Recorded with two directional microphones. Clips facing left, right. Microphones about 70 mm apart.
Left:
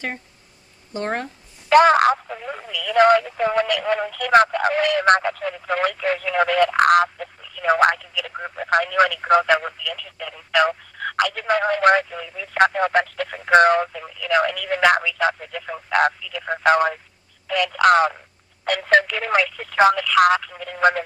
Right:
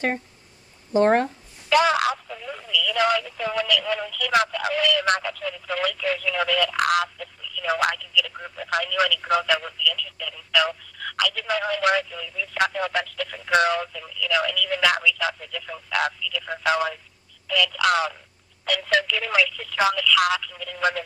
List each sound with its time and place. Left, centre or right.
0.9 s speech: centre
1.7 s speech: left